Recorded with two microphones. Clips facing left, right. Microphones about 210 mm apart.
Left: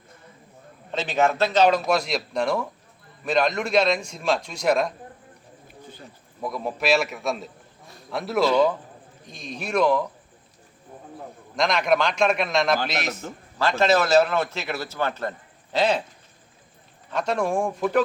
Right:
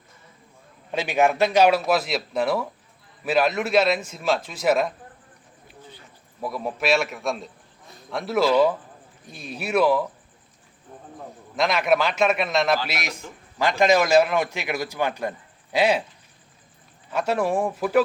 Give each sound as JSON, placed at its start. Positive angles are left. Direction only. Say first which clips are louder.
{"t": 0.9, "sound": "a man's voice", "louder": "right 1 dB", "side_deg": -10}
{"t": 5.6, "sound": "bird", "louder": "left 2 dB", "side_deg": 50}
{"t": 6.4, "sound": "a man's voice", "louder": "even", "side_deg": 0}
{"t": 11.5, "sound": "a man's voice", "louder": "right 1 dB", "side_deg": -5}
{"t": 17.1, "sound": "a man's voice", "louder": "right 1 dB", "side_deg": -5}